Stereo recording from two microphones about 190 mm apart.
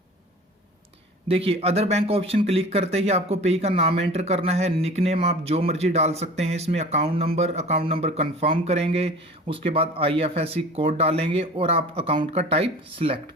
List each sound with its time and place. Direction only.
1.3 s speech: 30° right (ahead or behind)